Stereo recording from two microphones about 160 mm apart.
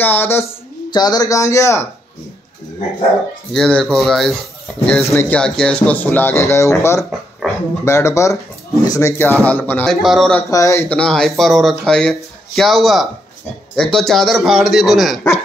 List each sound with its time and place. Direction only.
0.0 s speech: 15° left (ahead or behind)
0.8 s speech: 25° left (ahead or behind)
3.5 s speech: 5° left (ahead or behind)
5.0 s speech: 15° left (ahead or behind)
5.4 s speech: 5° left (ahead or behind)
7.4 s dog: 5° right (ahead or behind)
7.8 s speech: 15° left (ahead or behind)
9.8 s speech: centre (ahead or behind)
10.5 s speech: 20° left (ahead or behind); by 15.1 s centre (ahead or behind)